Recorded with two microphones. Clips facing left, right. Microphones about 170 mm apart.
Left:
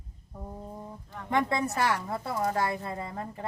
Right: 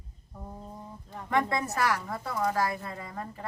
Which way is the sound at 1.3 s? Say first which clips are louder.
Left 1 dB; 25° left (ahead or behind).